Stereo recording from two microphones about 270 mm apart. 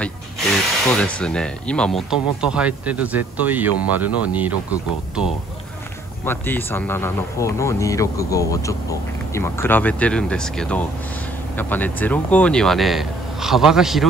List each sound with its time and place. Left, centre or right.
0.0 s speech: centre
6.2 s speech: centre